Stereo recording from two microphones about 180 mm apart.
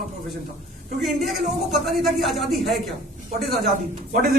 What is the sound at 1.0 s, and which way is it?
Speech, centre (ahead or behind).